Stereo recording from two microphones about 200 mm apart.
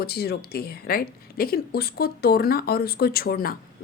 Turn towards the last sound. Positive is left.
turn(degrees=45)  # may be behind; listen again after turning